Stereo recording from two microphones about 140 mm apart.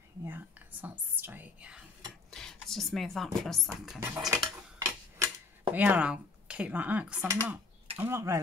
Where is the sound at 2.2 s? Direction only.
Centre (ahead or behind).